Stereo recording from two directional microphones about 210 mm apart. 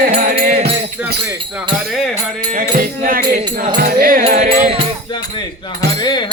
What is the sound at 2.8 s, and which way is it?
Speech, 40° right (ahead or behind).